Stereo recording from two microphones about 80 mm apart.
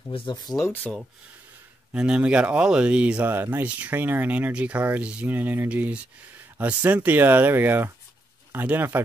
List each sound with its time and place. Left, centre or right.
0.2 s speech: left
0.9 s speech: centre
1.9 s speech: centre